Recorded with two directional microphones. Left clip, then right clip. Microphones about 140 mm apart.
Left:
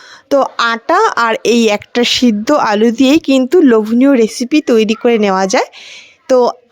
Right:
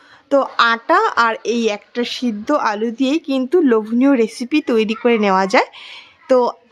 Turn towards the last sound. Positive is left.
turn(degrees=35)  # may be behind; listen again after turning